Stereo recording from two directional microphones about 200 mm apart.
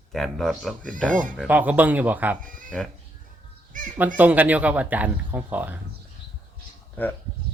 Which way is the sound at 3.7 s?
40° right (ahead or behind).